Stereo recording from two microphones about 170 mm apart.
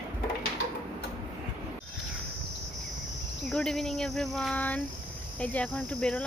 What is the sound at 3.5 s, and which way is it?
Speech, 5° left (ahead or behind).